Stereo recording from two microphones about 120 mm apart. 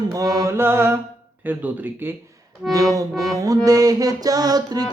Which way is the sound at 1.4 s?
15° right (ahead or behind).